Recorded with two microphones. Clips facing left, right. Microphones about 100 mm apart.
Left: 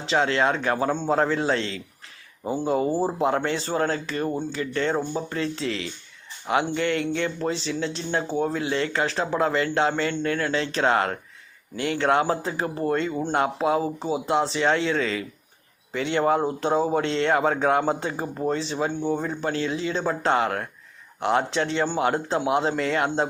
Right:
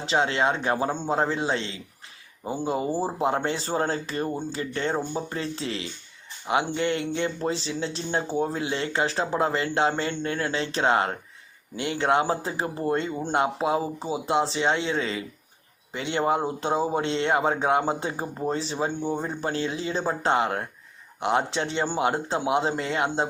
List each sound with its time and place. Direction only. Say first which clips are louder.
0.1 s a man's voice: left 2 dB; 25° right (ahead or behind)
0.9 s speech: left 3 dB; 10° right (ahead or behind)
1.2 s a man's voice: left 3 dB; 20° right (ahead or behind)
3.2 s a man's voice: left 2 dB; 30° right (ahead or behind)
17.0 s a man's voice: left 2 dB; 25° right (ahead or behind)
20.2 s a man's voice: left 1 dB; 25° right (ahead or behind)